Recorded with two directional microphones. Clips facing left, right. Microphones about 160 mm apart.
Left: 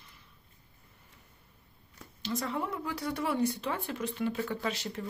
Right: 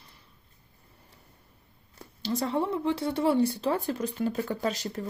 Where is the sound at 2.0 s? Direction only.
35° right (ahead or behind).